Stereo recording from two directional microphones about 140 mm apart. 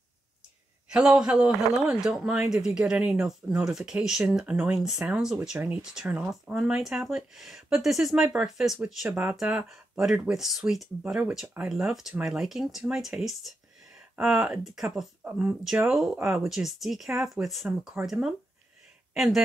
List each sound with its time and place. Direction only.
0.8 s a man's voice: 5° right (ahead or behind)